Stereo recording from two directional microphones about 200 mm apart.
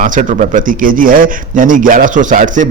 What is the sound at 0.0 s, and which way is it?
Speech, 40° right (ahead or behind).